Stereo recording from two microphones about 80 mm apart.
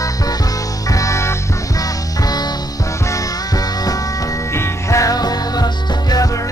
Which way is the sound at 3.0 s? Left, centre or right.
Left.